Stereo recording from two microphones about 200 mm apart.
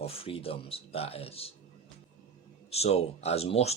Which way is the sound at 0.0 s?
30° left (ahead or behind).